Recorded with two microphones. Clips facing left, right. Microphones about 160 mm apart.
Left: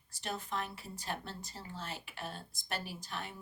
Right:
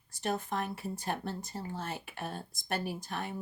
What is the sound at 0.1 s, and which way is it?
Speech, 50° right (ahead or behind).